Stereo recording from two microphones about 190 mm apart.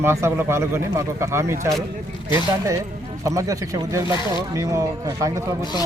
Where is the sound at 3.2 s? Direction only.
15° right (ahead or behind).